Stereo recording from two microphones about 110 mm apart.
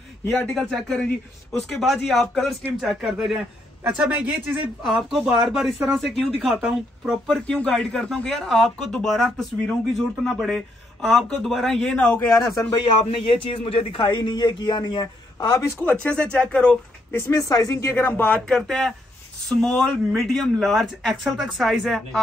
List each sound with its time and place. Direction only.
0.5 s a man's voice: 5° left (ahead or behind)
7.4 s speech: 10° left (ahead or behind)
12.4 s a man's voice: 35° left (ahead or behind)
12.7 s a man's voice: 50° left (ahead or behind)
15.8 s speech: 10° left (ahead or behind)
17.1 s speech: 25° left (ahead or behind); by 22.2 s centre (ahead or behind)